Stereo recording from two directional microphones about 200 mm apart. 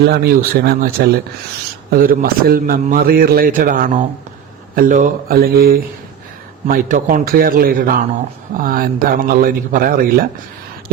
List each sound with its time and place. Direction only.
0.0 s a man's voice: 50° right (ahead or behind)